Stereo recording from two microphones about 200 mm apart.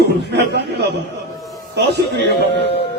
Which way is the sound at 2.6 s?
55° left (ahead or behind).